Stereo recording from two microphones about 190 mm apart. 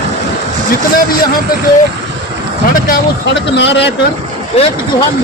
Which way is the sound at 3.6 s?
65° left (ahead or behind).